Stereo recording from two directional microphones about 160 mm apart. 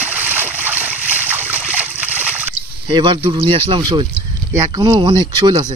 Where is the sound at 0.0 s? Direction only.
10° right (ahead or behind).